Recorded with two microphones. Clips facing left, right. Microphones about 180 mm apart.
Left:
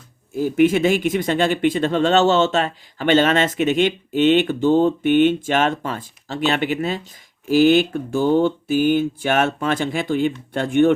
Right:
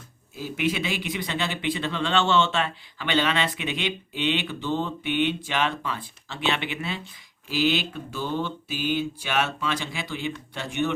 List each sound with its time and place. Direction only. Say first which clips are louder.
0.3 s speech: left 11 dB; 50° left (ahead or behind)